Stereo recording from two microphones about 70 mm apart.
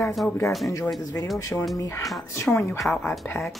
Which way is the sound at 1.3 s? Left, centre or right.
Left.